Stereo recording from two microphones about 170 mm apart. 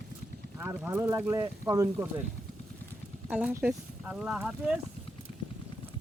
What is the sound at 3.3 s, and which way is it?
Speech, 10° right (ahead or behind).